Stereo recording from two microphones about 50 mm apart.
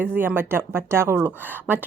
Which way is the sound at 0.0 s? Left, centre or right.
Right.